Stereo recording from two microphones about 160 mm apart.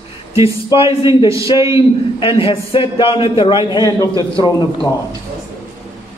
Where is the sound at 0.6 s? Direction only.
30° left (ahead or behind).